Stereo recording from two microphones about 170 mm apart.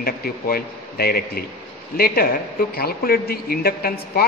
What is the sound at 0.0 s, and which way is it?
A woman's voice, 60° left (ahead or behind).